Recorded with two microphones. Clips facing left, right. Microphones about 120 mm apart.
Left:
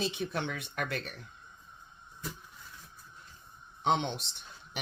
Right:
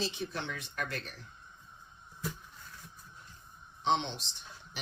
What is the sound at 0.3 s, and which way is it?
Speech, 60° left (ahead or behind).